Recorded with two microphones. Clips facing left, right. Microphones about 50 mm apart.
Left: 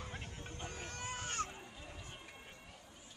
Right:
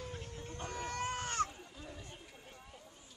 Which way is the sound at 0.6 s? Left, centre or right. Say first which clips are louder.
Right 8 dB; right.